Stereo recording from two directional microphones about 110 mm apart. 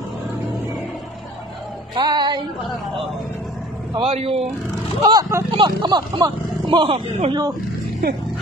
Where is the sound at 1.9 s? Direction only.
40° right (ahead or behind).